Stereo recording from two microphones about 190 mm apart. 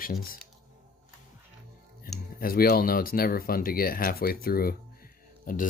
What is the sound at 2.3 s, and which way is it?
Speech, 50° left (ahead or behind).